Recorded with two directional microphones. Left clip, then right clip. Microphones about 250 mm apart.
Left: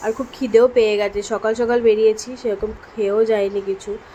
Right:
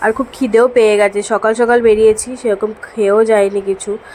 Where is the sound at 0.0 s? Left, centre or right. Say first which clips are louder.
Right 8 dB; centre.